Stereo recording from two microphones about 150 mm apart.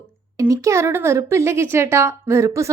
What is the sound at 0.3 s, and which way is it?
A woman's voice, 20° right (ahead or behind).